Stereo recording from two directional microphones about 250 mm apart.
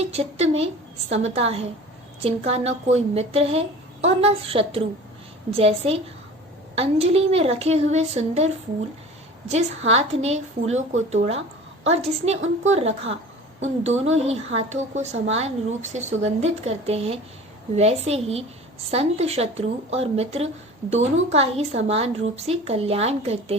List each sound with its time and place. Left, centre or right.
0.0 s a woman's voice: right
9.5 s a woman's voice: right